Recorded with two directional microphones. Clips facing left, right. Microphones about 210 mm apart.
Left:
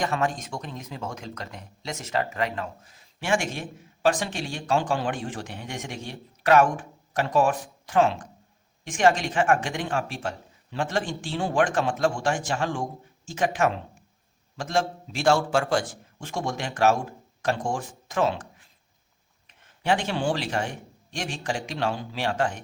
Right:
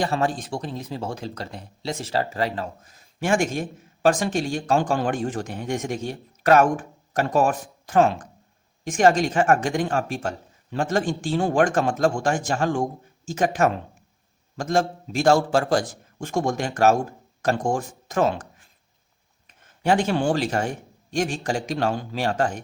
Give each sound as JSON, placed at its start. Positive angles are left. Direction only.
{"t": 0.0, "sound": "speech", "side_deg": -30}
{"t": 19.5, "sound": "speech", "side_deg": -45}